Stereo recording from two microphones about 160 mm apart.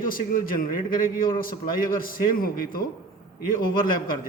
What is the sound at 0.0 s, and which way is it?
A man's voice, 60° left (ahead or behind).